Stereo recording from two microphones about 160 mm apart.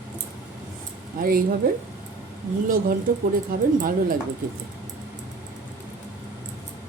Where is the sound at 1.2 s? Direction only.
65° right (ahead or behind).